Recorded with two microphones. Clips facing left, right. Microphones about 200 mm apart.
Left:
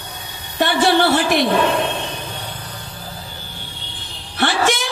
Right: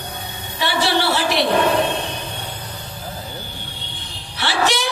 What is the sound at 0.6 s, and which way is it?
Music, 50° left (ahead or behind).